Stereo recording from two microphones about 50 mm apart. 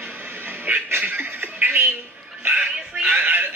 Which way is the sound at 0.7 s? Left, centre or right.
Right.